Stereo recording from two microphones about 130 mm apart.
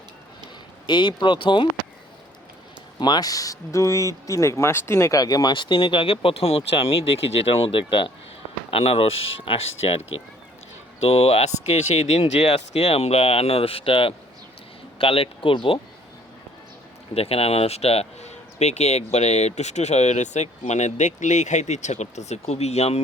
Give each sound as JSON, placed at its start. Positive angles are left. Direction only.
{"t": 0.9, "sound": "speech", "side_deg": 35}
{"t": 3.0, "sound": "speech", "side_deg": 30}
{"t": 17.2, "sound": "speech", "side_deg": 50}